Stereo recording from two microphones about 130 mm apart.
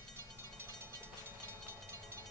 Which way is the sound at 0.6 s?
15° right (ahead or behind).